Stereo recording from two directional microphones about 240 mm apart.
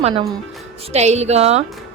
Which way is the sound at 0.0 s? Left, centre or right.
Right.